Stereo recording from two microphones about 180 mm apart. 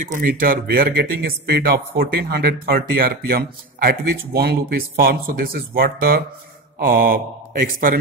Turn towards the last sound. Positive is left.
turn(degrees=-55)  # may be behind; listen again after turning